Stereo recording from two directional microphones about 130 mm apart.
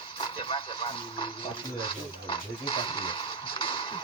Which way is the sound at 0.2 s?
40° left (ahead or behind).